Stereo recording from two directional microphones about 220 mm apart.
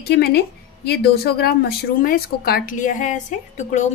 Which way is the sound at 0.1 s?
45° left (ahead or behind).